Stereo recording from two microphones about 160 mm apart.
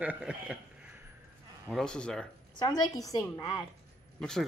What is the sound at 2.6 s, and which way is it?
A woman's voice, 20° left (ahead or behind).